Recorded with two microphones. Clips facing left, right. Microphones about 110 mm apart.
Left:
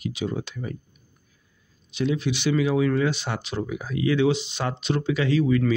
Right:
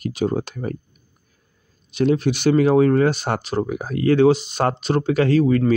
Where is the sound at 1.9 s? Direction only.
50° right (ahead or behind).